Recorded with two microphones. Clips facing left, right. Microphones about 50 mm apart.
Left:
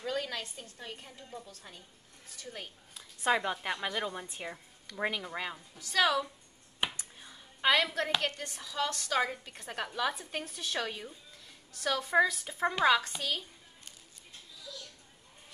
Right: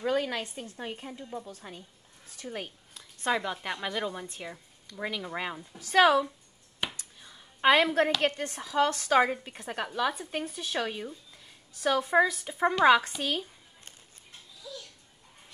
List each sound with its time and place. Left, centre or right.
0.0 s a woman's voice: right
2.9 s a sound: centre
3.5 s a woman's voice: centre
4.9 s speech: centre
5.2 s speech: centre
5.8 s a woman's voice: right
6.8 s music: left
7.6 s a woman's voice: right
9.6 s speech: centre
12.8 s a woman's voice: right